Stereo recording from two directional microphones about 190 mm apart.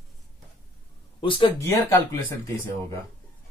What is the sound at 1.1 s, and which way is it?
Speech, 25° left (ahead or behind).